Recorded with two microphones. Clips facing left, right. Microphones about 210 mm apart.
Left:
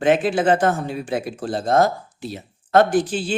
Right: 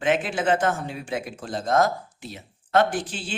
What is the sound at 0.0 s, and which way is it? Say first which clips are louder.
A man's voice: left 6 dB; 35° left (ahead or behind).